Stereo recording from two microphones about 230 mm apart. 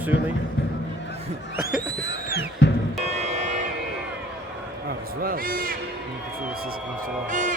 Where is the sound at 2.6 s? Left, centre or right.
Left.